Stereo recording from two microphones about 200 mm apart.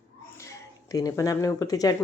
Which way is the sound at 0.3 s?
15° left (ahead or behind).